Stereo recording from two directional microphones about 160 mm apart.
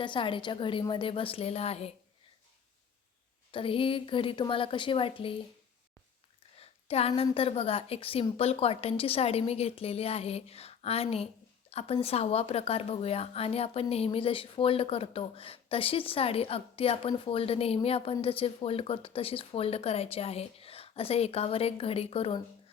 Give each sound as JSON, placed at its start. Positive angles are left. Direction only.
{"t": 0.0, "sound": "speech", "side_deg": 30}
{"t": 3.5, "sound": "speech", "side_deg": 35}
{"t": 6.6, "sound": "a sound", "side_deg": 40}
{"t": 7.2, "sound": "speech", "side_deg": 35}